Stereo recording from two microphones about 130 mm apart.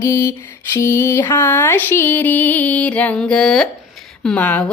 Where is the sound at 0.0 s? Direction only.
25° left (ahead or behind).